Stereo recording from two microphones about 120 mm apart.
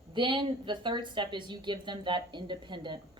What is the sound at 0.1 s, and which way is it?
A woman's voice, 40° right (ahead or behind).